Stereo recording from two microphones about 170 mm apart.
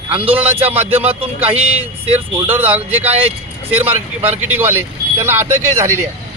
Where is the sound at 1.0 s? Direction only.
35° right (ahead or behind).